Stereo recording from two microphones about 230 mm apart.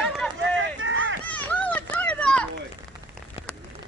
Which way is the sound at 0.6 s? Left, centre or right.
Right.